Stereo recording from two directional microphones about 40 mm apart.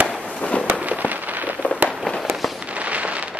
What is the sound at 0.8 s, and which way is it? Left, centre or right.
Fireworks, right.